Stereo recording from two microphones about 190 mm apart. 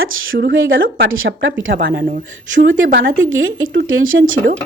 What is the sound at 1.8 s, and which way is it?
Speech, 60° right (ahead or behind).